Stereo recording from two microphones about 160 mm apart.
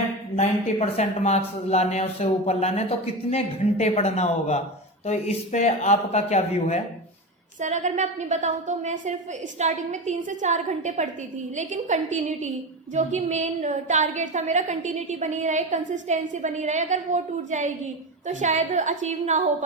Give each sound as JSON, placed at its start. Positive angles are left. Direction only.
{"t": 0.3, "sound": "speech", "side_deg": 45}
{"t": 7.6, "sound": "a woman's voice", "side_deg": -50}